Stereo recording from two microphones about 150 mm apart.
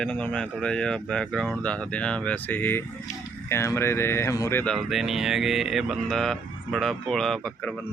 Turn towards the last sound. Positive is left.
turn(degrees=10)  # may be behind; listen again after turning